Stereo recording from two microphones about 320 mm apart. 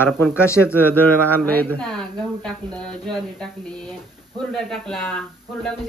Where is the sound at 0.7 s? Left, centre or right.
Centre.